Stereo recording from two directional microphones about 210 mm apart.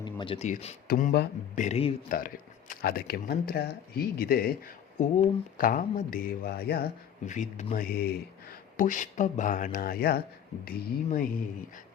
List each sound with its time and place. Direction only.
0.0 s speech: 25° left (ahead or behind); by 1.6 s 45° left (ahead or behind)
1.6 s speech: 30° left (ahead or behind); by 6.8 s 50° left (ahead or behind)
7.3 s speech: 35° left (ahead or behind)